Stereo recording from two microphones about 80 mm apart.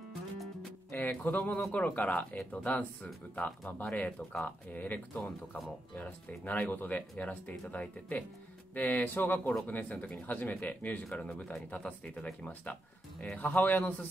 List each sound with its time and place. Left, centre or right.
0.9 s speech: left